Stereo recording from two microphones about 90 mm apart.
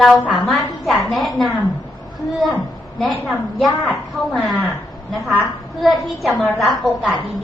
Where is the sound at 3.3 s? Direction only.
Centre (ahead or behind).